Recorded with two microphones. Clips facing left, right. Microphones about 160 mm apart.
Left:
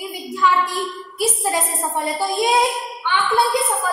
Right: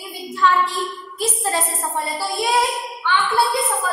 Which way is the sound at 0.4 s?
10° left (ahead or behind).